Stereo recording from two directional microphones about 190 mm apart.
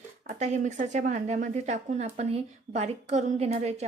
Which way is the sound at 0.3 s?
40° right (ahead or behind).